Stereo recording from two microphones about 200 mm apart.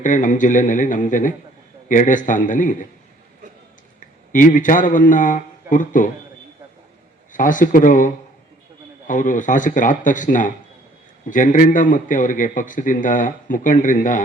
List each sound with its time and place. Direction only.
0.0 s a man's voice: 40° left (ahead or behind)
4.3 s a man's voice: 40° left (ahead or behind)
7.3 s a man's voice: 40° left (ahead or behind)